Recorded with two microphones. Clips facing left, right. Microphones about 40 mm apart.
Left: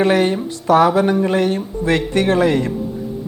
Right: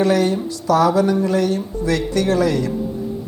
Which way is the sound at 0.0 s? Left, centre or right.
Left.